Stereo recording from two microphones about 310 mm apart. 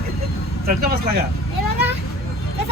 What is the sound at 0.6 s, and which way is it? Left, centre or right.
Speech, right.